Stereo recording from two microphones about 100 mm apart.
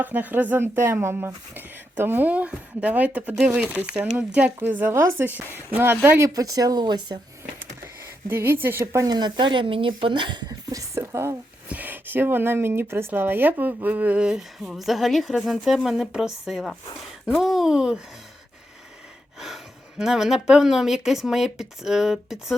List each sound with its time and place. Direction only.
0.0 s a woman's voice: 15° right (ahead or behind)
6.2 s speech: 35° right (ahead or behind)
8.3 s a woman's voice: 20° right (ahead or behind)
9.0 s speech: 45° right (ahead or behind); by 11.3 s 30° right (ahead or behind)
11.7 s speech: 20° right (ahead or behind)
19.4 s a woman's voice: 5° right (ahead or behind)